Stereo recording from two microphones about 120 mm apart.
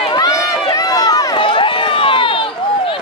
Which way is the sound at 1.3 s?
45° left (ahead or behind).